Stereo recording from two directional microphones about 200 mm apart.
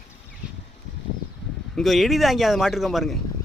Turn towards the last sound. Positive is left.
turn(degrees=0)  # may be behind; listen again after turning